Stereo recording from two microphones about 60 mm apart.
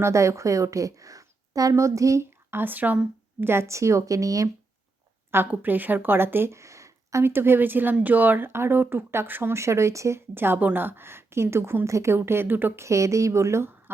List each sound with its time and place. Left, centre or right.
0.0 s a woman's voice: right
1.7 s speech: right
2.5 s speech: right
3.4 s speech: right
5.5 s speech: right
6.6 s a sound: right
7.3 s speech: right
9.6 s speech: right
10.2 s speech: right
11.9 s speech: right
12.1 s speech: right
12.8 s speech: right